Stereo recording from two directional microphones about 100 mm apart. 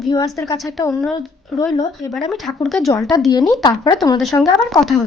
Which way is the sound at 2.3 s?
Centre (ahead or behind).